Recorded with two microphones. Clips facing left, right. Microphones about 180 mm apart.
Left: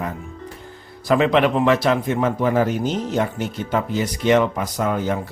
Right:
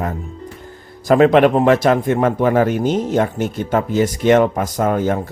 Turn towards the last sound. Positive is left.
turn(degrees=-50)  # may be behind; listen again after turning